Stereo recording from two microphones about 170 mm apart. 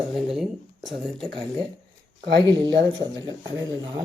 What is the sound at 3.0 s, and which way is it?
Speech, 20° right (ahead or behind).